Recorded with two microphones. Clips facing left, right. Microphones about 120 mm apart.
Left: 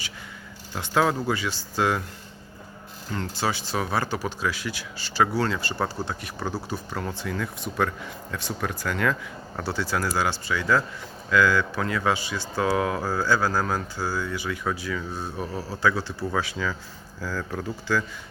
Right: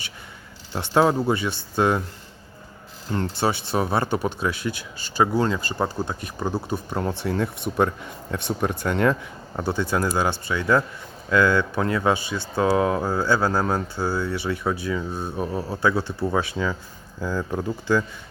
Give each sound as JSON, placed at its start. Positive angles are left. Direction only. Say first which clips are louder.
{"t": 0.7, "sound": "speech", "louder": "right 4 dB", "side_deg": -25}
{"t": 3.1, "sound": "speech", "louder": "right 4 dB", "side_deg": -30}